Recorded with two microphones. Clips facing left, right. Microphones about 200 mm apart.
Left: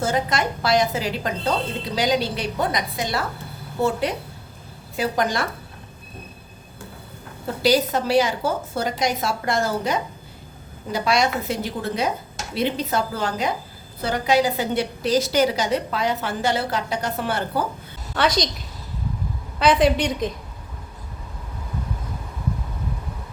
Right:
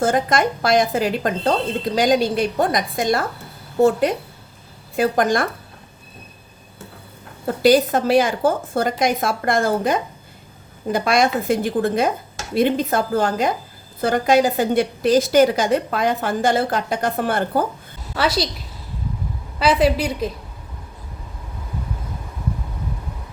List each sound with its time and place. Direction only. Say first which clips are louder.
0.0 s a woman's voice: right 4 dB; 50° right (ahead or behind)
4.9 s a woman's voice: right 5 dB; 50° right (ahead or behind)
7.4 s a woman's voice: right 5 dB; 50° right (ahead or behind)
18.1 s a woman's voice: right 1 dB; 5° right (ahead or behind)
19.5 s a woman's voice: right 1 dB; 5° right (ahead or behind)